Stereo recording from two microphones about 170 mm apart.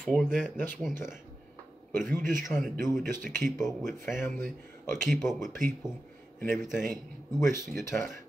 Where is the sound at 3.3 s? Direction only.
15° left (ahead or behind).